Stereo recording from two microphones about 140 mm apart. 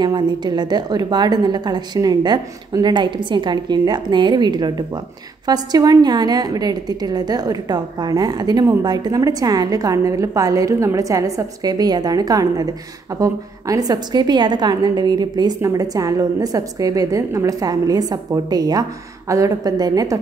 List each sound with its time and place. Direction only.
0.0 s a woman's voice: 30° right (ahead or behind)